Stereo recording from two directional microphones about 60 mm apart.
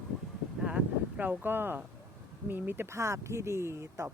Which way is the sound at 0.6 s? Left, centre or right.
Centre.